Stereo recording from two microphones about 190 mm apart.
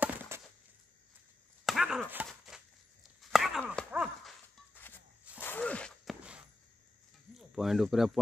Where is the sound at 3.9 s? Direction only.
5° right (ahead or behind).